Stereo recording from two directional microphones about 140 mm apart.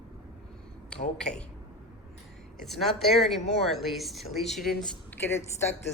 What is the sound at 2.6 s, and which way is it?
A woman's voice, centre (ahead or behind).